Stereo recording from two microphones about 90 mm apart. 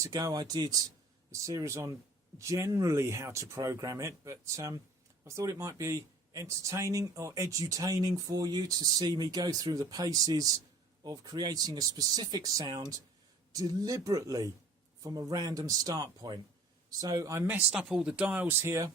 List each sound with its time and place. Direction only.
0.0 s speech: 40° right (ahead or behind)
1.3 s speech: 35° right (ahead or behind)
17.4 s speech: 20° right (ahead or behind)
17.7 s speech: 5° right (ahead or behind); by 18.9 s 30° right (ahead or behind)